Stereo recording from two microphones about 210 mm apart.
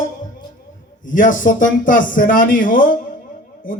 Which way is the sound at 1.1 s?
40° left (ahead or behind).